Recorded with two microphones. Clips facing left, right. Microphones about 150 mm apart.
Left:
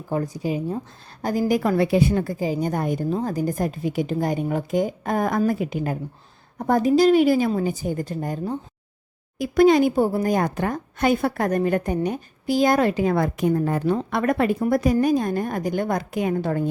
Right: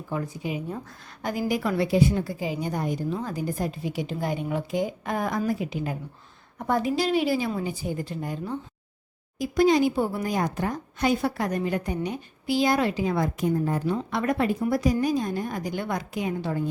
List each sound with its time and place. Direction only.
0.1 s a woman's voice: 40° left (ahead or behind); by 2.3 s 60° left (ahead or behind)
2.4 s a woman's voice: 40° left (ahead or behind)
3.1 s a woman's voice: 40° left (ahead or behind)
9.4 s a woman's voice: 60° left (ahead or behind)
13.9 s a woman's voice: 55° left (ahead or behind)